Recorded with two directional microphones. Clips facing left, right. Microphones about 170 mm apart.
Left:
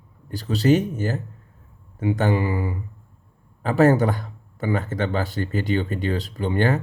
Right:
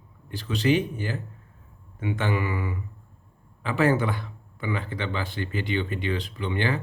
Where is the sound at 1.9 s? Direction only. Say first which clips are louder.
Left 6 dB; 40° left (ahead or behind).